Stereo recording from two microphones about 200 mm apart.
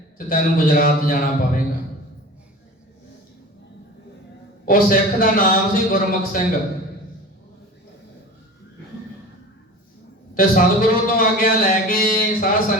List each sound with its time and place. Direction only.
0.3 s a man's voice: 45° left (ahead or behind)
4.6 s a man's voice: 45° left (ahead or behind)
10.3 s a man's voice: 45° left (ahead or behind)